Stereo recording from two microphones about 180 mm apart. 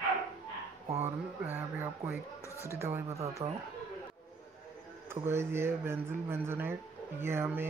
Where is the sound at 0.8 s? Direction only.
35° right (ahead or behind).